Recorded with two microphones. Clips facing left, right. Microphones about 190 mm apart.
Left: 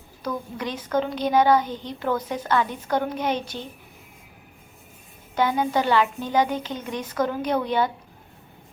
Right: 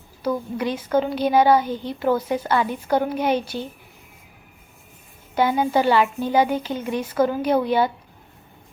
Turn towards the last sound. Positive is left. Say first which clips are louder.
# right 4 dB
turn(degrees=-10)  # may be behind; listen again after turning